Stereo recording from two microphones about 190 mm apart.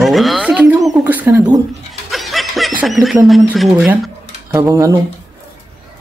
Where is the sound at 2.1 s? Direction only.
Centre (ahead or behind).